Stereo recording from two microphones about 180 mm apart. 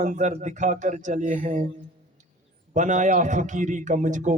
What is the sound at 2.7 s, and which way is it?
Speech, 45° right (ahead or behind).